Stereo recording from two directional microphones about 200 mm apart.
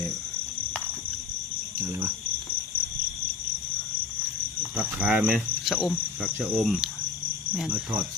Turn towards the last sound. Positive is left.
turn(degrees=-5)  # may be behind; listen again after turning